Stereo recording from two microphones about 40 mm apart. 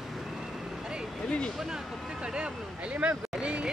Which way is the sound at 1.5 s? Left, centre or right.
Centre.